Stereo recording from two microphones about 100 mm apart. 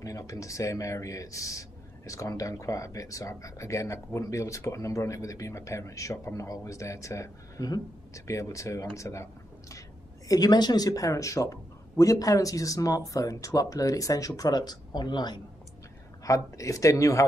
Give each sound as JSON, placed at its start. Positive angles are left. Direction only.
{"t": 0.0, "sound": "speech", "side_deg": 35}
{"t": 16.3, "sound": "speech", "side_deg": 35}